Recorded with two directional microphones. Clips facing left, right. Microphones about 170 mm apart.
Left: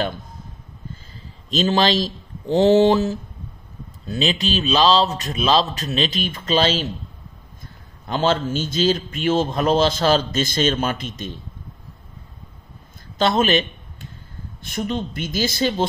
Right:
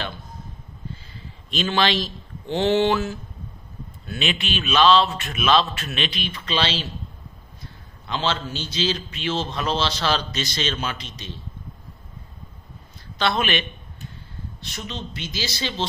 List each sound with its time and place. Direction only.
1.5 s a man's voice: 40° left (ahead or behind)
13.2 s a man's voice: 40° left (ahead or behind)